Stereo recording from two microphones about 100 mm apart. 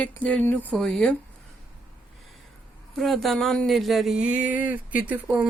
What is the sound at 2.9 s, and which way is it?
Speech, centre (ahead or behind).